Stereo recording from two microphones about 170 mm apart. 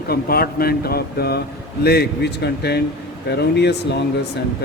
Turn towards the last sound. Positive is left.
turn(degrees=80)